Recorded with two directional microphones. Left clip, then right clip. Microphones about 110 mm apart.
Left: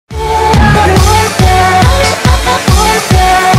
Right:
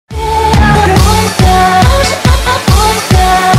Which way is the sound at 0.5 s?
20° right (ahead or behind).